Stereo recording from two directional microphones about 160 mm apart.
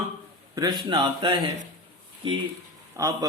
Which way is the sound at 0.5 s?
25° right (ahead or behind).